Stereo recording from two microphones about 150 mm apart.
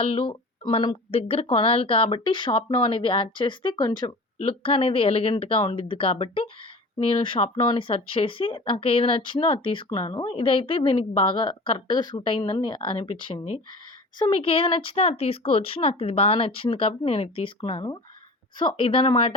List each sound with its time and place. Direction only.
0.0 s speech: 40° left (ahead or behind)